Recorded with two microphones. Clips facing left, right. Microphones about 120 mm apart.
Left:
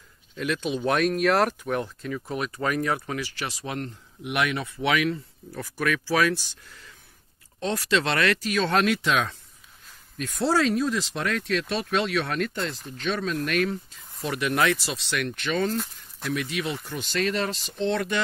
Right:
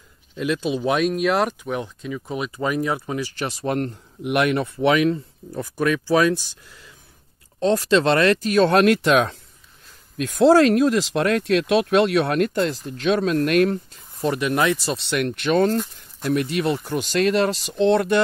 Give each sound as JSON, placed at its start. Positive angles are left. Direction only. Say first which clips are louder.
{"t": 0.4, "sound": "speech", "louder": "right 4 dB", "side_deg": -20}
{"t": 3.6, "sound": "speech", "louder": "right 9 dB", "side_deg": -50}
{"t": 4.8, "sound": "speech", "louder": "right 6 dB", "side_deg": -30}
{"t": 7.6, "sound": "speech", "louder": "right 8 dB", "side_deg": -30}
{"t": 8.5, "sound": "speech", "louder": "right 9 dB", "side_deg": -60}
{"t": 10.2, "sound": "speech", "louder": "right 9 dB", "side_deg": -80}
{"t": 14.2, "sound": "speech", "louder": "right 4 dB", "side_deg": -25}
{"t": 14.9, "sound": "speech", "louder": "right 6 dB", "side_deg": -50}